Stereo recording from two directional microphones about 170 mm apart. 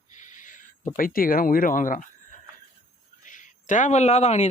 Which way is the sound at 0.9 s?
55° left (ahead or behind).